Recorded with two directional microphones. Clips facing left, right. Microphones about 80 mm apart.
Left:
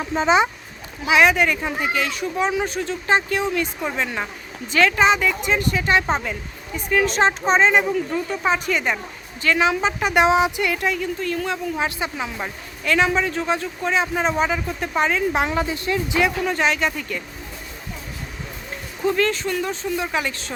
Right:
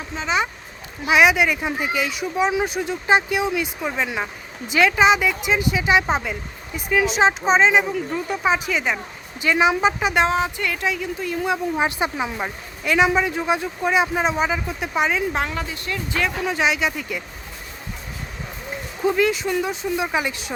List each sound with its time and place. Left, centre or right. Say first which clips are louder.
1.0 s speech: even; centre
9.4 s speech: right 1 dB; centre
10.0 s speech: left 1 dB; centre
10.2 s speech: left 4 dB; centre
15.4 s a woman's voice: left 5 dB; centre
16.4 s speech: even; centre
19.0 s speech: right 1 dB; centre